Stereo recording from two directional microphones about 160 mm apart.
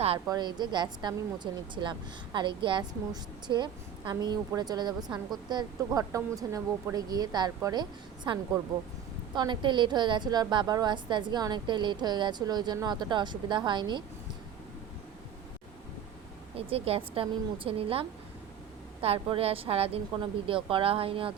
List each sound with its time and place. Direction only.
0.3 s a woman's voice: 25° right (ahead or behind)
16.6 s a woman's voice: 35° right (ahead or behind)
19.0 s a woman's voice: 35° right (ahead or behind)